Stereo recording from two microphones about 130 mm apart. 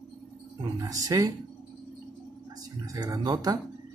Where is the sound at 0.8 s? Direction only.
25° right (ahead or behind).